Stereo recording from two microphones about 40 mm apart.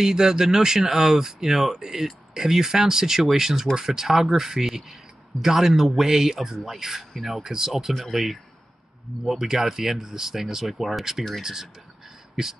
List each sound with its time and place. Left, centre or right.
0.0 s speech: centre
7.4 s speech: centre
7.8 s speech: centre